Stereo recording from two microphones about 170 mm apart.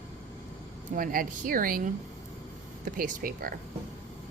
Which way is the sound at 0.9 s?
55° right (ahead or behind).